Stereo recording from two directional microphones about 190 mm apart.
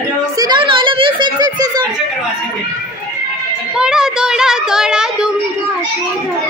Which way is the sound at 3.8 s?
5° right (ahead or behind).